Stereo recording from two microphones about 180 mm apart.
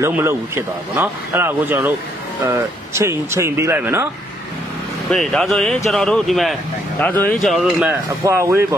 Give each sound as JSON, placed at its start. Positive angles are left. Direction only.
{"t": 0.0, "sound": "a man's voice", "side_deg": -15}
{"t": 5.1, "sound": "speech", "side_deg": 0}
{"t": 8.2, "sound": "a man's voice", "side_deg": -15}